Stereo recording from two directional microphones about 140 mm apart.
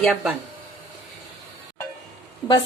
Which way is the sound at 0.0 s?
5° left (ahead or behind).